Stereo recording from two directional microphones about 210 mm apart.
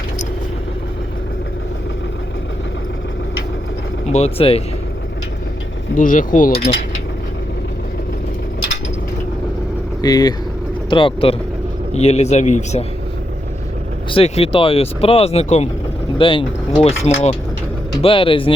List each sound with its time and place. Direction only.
4.1 s speech: 30° left (ahead or behind)
6.0 s a man's voice: 40° left (ahead or behind)
10.0 s a man's voice: 20° left (ahead or behind); by 12.8 s 35° left (ahead or behind)
14.1 s a man's voice: 25° left (ahead or behind)